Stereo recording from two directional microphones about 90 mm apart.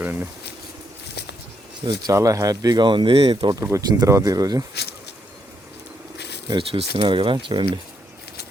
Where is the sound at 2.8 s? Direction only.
65° right (ahead or behind).